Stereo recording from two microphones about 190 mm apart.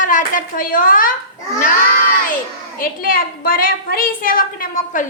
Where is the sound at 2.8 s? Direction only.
50° left (ahead or behind).